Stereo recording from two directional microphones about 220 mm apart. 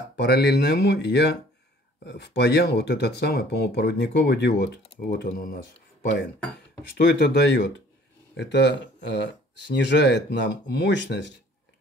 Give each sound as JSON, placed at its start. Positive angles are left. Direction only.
{"t": 0.1, "sound": "speech", "side_deg": 50}
{"t": 7.2, "sound": "speech", "side_deg": 50}